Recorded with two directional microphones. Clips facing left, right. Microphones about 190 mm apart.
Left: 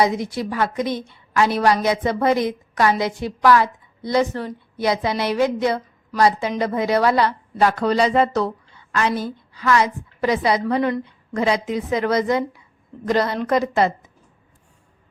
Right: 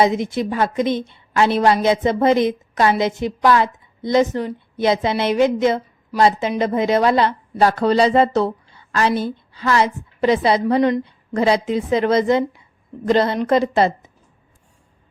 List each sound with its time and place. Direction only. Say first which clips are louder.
0.0 s speech: right 3 dB; 20° right (ahead or behind)